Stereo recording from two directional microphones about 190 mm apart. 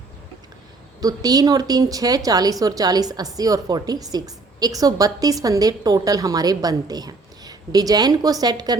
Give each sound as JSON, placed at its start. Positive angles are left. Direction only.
{"t": 1.0, "sound": "a woman's voice", "side_deg": -20}